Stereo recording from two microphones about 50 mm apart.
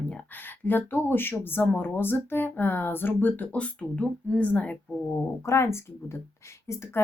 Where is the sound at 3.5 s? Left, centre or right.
Left.